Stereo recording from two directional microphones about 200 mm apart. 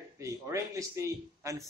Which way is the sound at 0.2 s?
15° right (ahead or behind).